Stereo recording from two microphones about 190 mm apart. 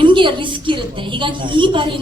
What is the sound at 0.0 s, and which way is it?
A woman's voice, 25° right (ahead or behind).